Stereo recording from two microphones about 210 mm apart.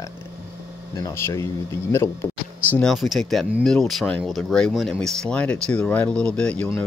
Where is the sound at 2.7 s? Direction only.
Centre (ahead or behind).